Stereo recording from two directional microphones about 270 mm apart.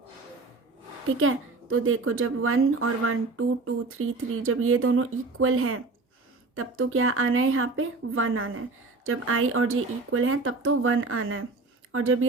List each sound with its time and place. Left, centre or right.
1.2 s speech: right